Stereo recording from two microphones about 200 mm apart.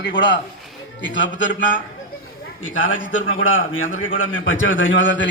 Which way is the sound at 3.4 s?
80° left.